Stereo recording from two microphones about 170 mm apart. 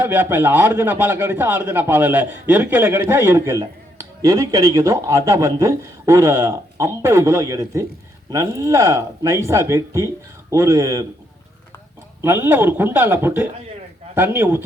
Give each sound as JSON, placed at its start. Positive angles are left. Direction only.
{"t": 0.0, "sound": "a man's voice", "side_deg": -10}
{"t": 12.2, "sound": "a man's voice", "side_deg": -15}